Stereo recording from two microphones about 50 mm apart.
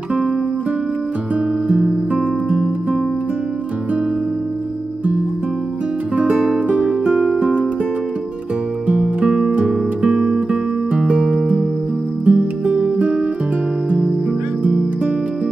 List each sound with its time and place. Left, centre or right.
1.7 s music: right
6.1 s music: right
7.1 s music: centre
8.8 s music: right